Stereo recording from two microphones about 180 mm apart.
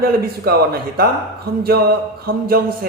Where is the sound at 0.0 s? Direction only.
55° right (ahead or behind).